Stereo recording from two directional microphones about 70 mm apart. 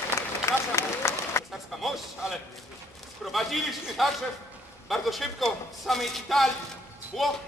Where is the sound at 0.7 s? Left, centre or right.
Left.